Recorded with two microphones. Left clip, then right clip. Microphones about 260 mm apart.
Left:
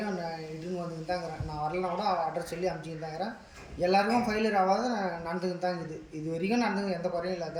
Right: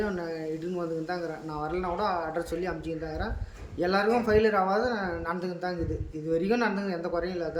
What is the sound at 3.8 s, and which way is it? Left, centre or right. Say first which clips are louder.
A man's voice: even; centre.